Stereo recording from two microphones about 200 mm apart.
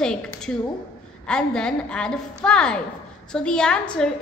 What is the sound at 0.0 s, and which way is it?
A woman's voice, 5° left (ahead or behind).